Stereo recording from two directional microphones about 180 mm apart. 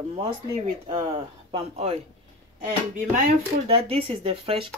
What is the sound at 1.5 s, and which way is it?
Speech, 35° right (ahead or behind).